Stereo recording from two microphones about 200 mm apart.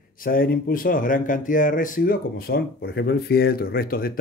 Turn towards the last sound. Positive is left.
turn(degrees=50)  # may be behind; listen again after turning